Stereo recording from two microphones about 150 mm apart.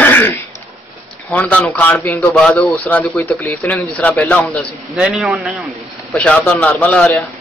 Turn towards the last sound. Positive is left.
turn(degrees=5)  # may be behind; listen again after turning